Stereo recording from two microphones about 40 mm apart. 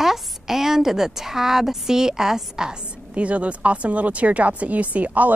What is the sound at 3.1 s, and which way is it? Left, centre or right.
A woman's voice, right.